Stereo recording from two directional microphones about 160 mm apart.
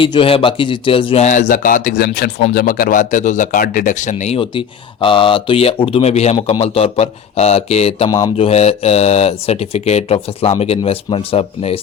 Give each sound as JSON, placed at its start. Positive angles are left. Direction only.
{"t": 0.0, "sound": "speech", "side_deg": 30}
{"t": 4.4, "sound": "speech", "side_deg": 35}